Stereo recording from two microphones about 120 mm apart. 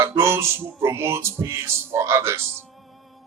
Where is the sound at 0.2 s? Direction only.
20° right (ahead or behind).